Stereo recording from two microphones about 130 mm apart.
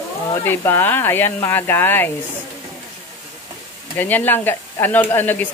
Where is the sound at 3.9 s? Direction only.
15° left (ahead or behind).